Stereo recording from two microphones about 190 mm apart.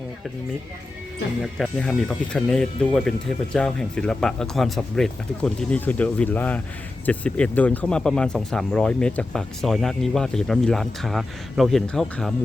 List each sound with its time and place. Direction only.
1.5 s speech: 5° left (ahead or behind)